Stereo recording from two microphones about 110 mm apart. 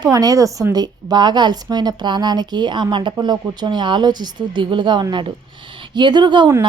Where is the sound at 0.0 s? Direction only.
35° right (ahead or behind).